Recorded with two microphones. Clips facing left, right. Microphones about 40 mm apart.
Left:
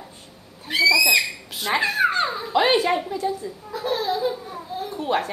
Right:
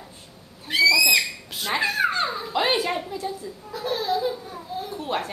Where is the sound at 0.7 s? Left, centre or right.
Centre.